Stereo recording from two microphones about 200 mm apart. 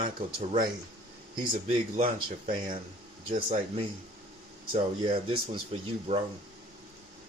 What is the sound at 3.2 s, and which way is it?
Speech, 25° right (ahead or behind).